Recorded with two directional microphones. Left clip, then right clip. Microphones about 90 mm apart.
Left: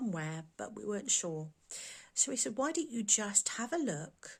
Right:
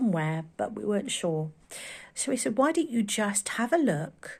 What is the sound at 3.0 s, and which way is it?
Speech, 55° left (ahead or behind).